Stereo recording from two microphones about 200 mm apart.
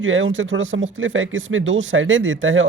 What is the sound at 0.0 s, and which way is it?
Speech, 75° right (ahead or behind).